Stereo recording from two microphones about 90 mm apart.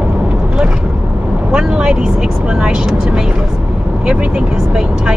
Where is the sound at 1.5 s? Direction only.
10° right (ahead or behind).